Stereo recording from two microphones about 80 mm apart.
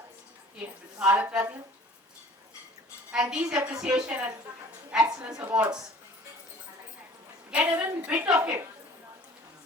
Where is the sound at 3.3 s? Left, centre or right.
Centre.